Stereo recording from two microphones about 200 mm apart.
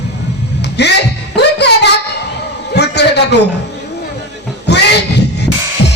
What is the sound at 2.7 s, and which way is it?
Speech, 55° left (ahead or behind).